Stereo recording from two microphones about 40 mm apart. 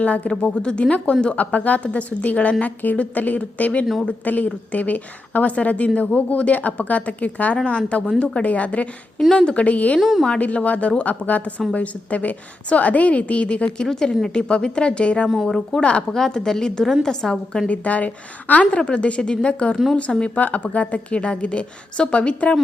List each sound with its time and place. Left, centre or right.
0.0 s a woman's voice: left
9.3 s a woman's voice: left
9.6 s a woman's voice: left
10.0 s a woman's voice: centre
10.2 s a woman's voice: left
13.8 s a woman's voice: centre
15.4 s a woman's voice: centre
15.8 s a woman's voice: left
16.1 s a woman's voice: centre
17.7 s a woman's voice: left
20.3 s a woman's voice: left